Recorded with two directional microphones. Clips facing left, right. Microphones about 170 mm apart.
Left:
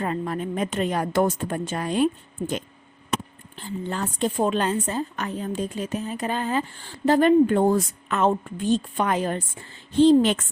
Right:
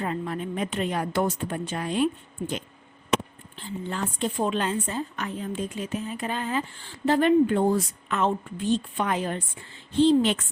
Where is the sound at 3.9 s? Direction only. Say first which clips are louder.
Left 3 dB; 40° left (ahead or behind).